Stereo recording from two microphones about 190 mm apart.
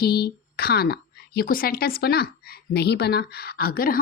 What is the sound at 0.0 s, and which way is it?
A woman's voice, 55° left (ahead or behind).